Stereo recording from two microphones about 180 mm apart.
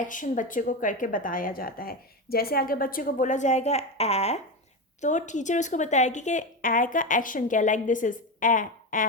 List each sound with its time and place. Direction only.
0.1 s a woman's voice: 45° left (ahead or behind)